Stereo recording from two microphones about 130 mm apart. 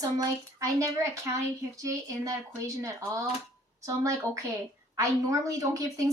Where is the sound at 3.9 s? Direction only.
25° right (ahead or behind).